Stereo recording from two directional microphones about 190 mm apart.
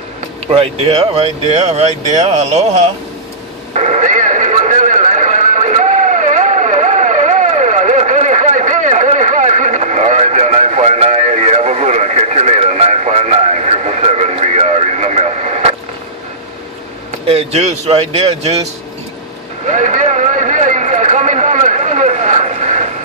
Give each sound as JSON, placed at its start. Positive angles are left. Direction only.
{"t": 0.5, "sound": "speech", "side_deg": -30}
{"t": 3.7, "sound": "radio", "side_deg": -40}
{"t": 17.3, "sound": "speech", "side_deg": -35}
{"t": 19.7, "sound": "vehicle", "side_deg": -40}